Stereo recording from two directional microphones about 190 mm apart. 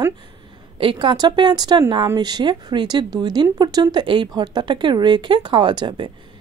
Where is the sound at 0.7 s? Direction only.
25° right (ahead or behind).